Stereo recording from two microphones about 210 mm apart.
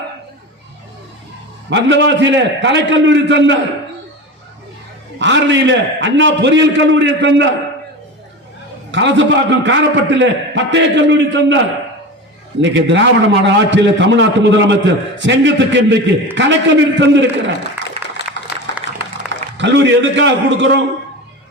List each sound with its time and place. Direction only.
1.7 s a man's voice: 60° right (ahead or behind)
5.2 s a man's voice: 60° right (ahead or behind)
8.9 s a man's voice: 60° right (ahead or behind)
17.8 s applause: 10° right (ahead or behind)
19.5 s a man's voice: 60° right (ahead or behind)